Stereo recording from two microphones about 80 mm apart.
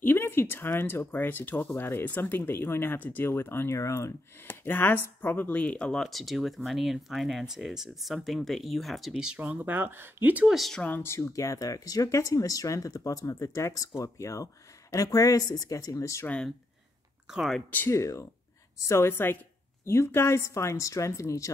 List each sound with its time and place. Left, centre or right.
0.0 s speech: left
4.5 s speech: left; by 10.3 s right
10.5 s speech: centre
10.8 s speech: left
11.1 s speech: left
17.3 s speech: centre
17.6 s speech: left
17.9 s speech: left